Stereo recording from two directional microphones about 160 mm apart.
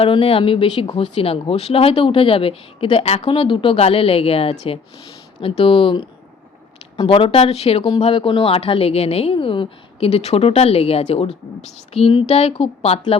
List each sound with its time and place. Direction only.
0.0 s speech: 35° left (ahead or behind)